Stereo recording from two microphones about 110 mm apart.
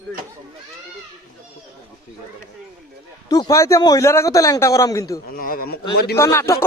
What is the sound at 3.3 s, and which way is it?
A man's voice, 35° left (ahead or behind).